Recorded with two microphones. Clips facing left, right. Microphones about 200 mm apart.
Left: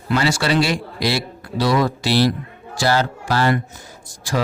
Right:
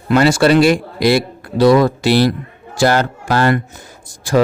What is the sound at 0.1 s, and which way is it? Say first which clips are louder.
Speech: right 8 dB; 55° right (ahead or behind).